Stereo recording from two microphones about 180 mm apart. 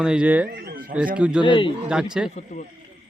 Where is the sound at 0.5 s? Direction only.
55° right (ahead or behind).